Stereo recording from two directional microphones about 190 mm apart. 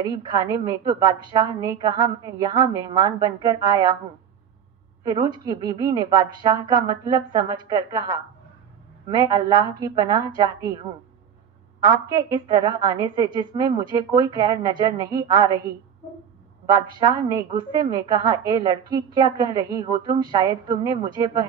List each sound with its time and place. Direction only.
0.0 s a woman's voice: 20° right (ahead or behind)
5.0 s a woman's voice: 25° right (ahead or behind)
11.8 s a woman's voice: 20° right (ahead or behind)
17.0 s a woman's voice: 20° right (ahead or behind)